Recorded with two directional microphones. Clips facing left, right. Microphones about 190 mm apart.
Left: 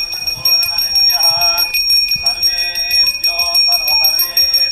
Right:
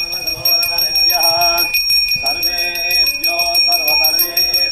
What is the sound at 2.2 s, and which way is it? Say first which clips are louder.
Music: right 7 dB; 65° right (ahead or behind).